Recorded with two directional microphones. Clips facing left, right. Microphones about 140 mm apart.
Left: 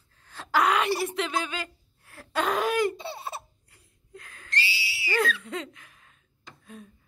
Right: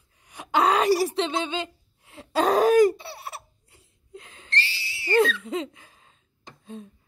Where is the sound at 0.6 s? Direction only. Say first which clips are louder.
Right 5 dB; 35° right (ahead or behind).